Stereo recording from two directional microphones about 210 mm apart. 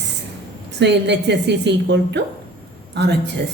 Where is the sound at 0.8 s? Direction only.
55° right (ahead or behind).